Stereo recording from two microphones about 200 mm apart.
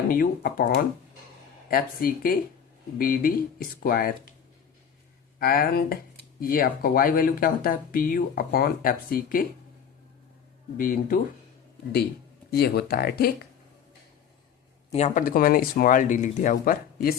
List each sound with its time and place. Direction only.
0.1 s speech: 45° left (ahead or behind)
5.4 s speech: 50° left (ahead or behind)
10.8 s speech: 45° left (ahead or behind)
12.5 s speech: 55° left (ahead or behind)
14.9 s speech: 40° left (ahead or behind)